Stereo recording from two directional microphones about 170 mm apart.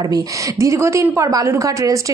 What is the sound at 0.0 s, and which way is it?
A woman's voice, 20° right (ahead or behind).